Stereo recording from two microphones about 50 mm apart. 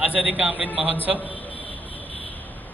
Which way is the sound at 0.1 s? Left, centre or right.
Right.